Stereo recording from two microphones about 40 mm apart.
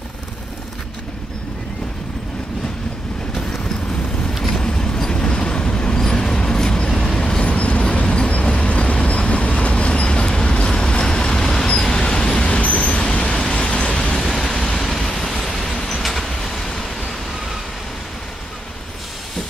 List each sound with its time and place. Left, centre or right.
4.5 s vehicle: centre
5.1 s train: left
5.9 s vehicle: centre
7.2 s vehicle: left
14.2 s vehicle: centre
16.0 s train: centre